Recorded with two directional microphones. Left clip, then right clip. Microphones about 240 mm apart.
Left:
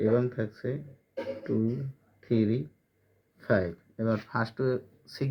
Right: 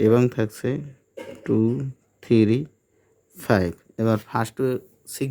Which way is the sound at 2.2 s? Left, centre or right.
Right.